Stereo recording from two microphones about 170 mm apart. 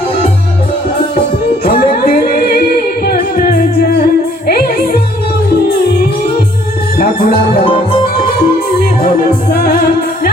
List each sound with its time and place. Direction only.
1.6 s music: 60° left (ahead or behind)
7.0 s music: 60° left (ahead or behind)
8.8 s music: 60° left (ahead or behind)